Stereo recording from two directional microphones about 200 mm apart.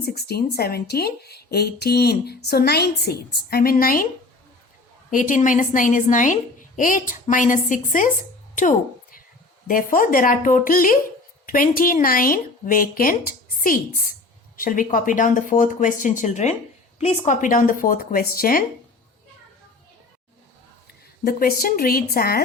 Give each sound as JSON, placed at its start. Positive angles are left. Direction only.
{"t": 0.0, "sound": "speech", "side_deg": 50}
{"t": 5.1, "sound": "speech", "side_deg": 40}
{"t": 9.6, "sound": "speech", "side_deg": 45}
{"t": 21.2, "sound": "speech", "side_deg": 50}